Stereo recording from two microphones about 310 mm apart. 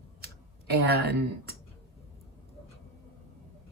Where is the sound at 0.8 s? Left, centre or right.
Right.